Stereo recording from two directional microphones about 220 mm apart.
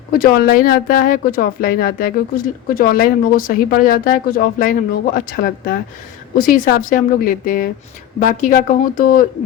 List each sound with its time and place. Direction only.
0.2 s speech: 40° left (ahead or behind)